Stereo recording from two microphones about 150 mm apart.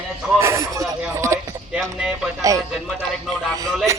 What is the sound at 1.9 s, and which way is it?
Speech, 5° right (ahead or behind).